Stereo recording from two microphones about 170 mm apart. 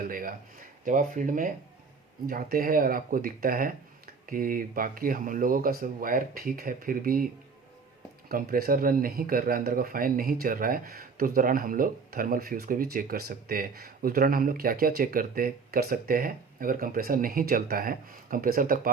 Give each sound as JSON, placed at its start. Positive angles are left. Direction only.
{"t": 0.0, "sound": "speech", "side_deg": -55}
{"t": 8.3, "sound": "speech", "side_deg": -60}